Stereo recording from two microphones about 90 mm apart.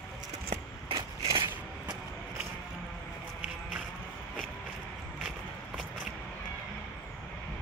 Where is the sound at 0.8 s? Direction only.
80° right.